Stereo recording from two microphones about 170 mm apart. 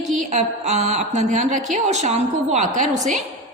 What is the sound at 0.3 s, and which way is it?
A woman's voice, 45° right (ahead or behind).